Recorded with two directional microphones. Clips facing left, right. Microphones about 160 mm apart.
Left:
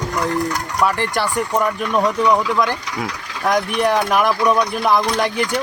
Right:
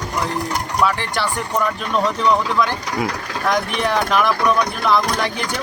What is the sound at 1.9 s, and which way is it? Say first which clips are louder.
Speech: left 1 dB; 15° left (ahead or behind).